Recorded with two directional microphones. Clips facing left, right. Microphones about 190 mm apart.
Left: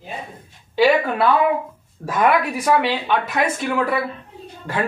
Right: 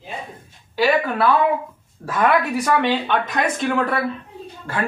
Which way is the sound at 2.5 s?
10° left (ahead or behind).